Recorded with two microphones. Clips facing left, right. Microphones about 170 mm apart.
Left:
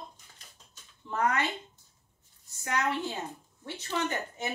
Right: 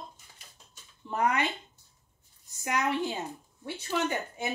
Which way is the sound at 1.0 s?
15° right (ahead or behind).